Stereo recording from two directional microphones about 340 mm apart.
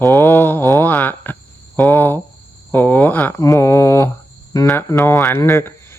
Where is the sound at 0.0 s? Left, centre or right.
Centre.